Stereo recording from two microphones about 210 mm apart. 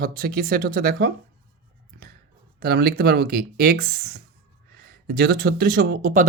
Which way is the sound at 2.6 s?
50° right (ahead or behind).